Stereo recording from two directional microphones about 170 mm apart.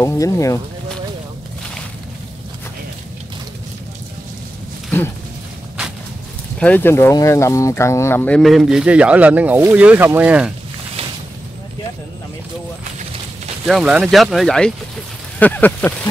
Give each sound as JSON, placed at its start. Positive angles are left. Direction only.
{"t": 0.0, "sound": "speech", "side_deg": 20}
{"t": 6.6, "sound": "speech", "side_deg": 10}
{"t": 8.4, "sound": "speech", "side_deg": 0}
{"t": 13.7, "sound": "speech", "side_deg": 0}